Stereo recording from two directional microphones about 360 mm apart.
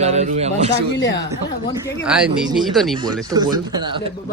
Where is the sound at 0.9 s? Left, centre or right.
Left.